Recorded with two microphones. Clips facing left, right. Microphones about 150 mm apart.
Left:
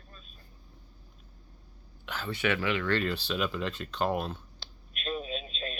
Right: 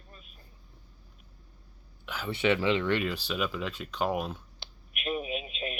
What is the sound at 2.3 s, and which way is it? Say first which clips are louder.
Speech: right 4 dB; 25° right (ahead or behind).